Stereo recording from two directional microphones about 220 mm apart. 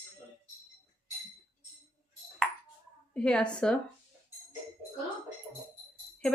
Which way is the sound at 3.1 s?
5° left (ahead or behind).